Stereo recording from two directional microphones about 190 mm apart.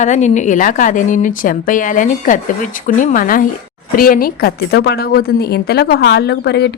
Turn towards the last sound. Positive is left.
turn(degrees=60)  # may be behind; listen again after turning